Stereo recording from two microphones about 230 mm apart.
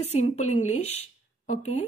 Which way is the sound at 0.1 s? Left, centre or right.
Left.